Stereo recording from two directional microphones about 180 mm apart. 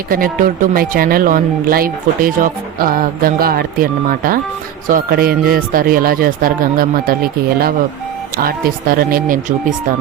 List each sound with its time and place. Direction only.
0.1 s speech: 50° right (ahead or behind)